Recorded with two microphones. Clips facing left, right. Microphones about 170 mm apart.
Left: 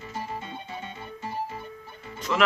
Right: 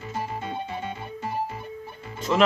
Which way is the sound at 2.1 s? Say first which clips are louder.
Right 4 dB; 25° right (ahead or behind).